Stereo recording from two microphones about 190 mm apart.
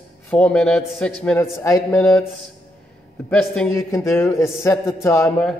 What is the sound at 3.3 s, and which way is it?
A man's voice, 5° left (ahead or behind).